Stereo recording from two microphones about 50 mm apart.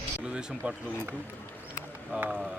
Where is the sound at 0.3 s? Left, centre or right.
Right.